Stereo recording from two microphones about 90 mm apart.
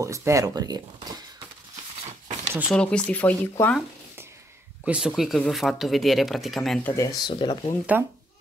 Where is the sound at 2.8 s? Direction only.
10° left (ahead or behind).